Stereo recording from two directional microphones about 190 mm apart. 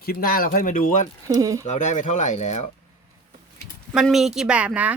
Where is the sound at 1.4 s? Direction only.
15° right (ahead or behind).